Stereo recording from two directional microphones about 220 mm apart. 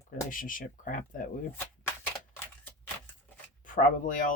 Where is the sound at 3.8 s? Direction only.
35° left (ahead or behind).